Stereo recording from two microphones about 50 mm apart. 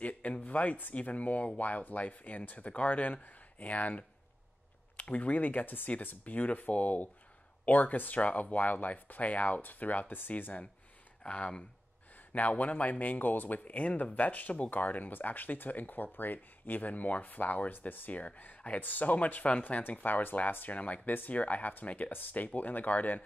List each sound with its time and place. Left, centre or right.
0.0 s speech: left
11.2 s speech: left